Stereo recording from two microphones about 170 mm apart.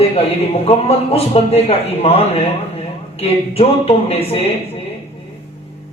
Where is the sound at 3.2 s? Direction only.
35° left (ahead or behind).